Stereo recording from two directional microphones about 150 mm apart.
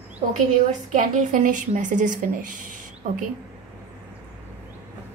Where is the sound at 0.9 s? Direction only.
60° right (ahead or behind).